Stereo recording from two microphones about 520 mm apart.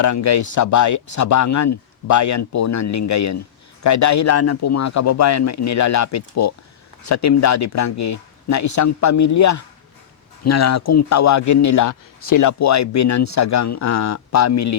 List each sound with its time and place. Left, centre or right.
0.0 s a man's voice: left